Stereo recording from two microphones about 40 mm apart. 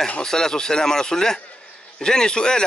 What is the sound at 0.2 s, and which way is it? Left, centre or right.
A man's voice, centre.